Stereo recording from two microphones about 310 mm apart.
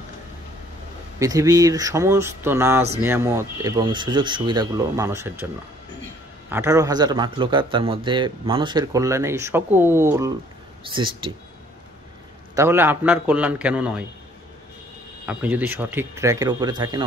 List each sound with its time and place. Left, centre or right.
1.2 s a man's voice: centre
6.5 s a man's voice: centre
12.5 s a man's voice: centre
15.2 s a man's voice: centre